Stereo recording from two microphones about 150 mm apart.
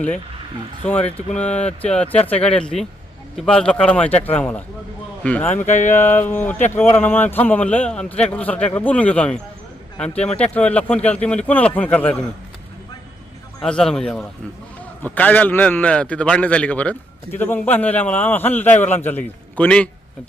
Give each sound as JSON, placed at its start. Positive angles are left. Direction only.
{"t": 1.1, "sound": "a man's voice", "side_deg": 10}
{"t": 5.6, "sound": "a sound", "side_deg": 55}
{"t": 6.0, "sound": "a man's voice", "side_deg": 15}
{"t": 13.6, "sound": "a man's voice", "side_deg": 5}